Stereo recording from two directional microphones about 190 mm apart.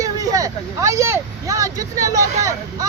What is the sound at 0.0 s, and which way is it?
Speech, 20° right (ahead or behind).